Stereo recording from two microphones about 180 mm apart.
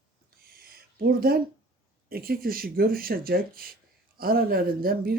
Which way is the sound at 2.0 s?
55° right (ahead or behind).